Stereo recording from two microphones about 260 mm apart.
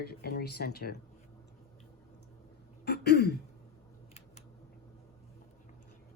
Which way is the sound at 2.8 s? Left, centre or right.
Left.